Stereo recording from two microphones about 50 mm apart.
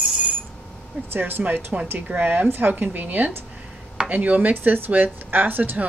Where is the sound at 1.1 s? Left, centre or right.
Right.